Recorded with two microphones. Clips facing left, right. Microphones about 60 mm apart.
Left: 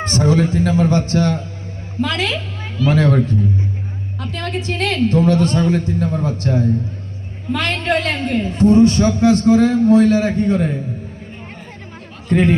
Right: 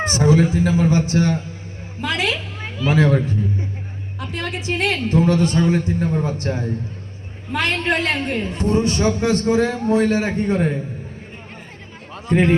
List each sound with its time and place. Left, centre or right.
0.0 s a man's voice: centre
12.3 s a man's voice: centre